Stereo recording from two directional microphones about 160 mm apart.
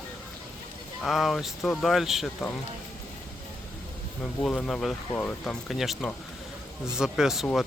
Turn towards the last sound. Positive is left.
turn(degrees=0)  # may be behind; listen again after turning